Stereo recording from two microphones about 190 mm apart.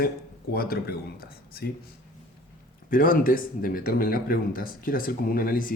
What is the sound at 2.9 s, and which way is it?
Speech, 50° left (ahead or behind).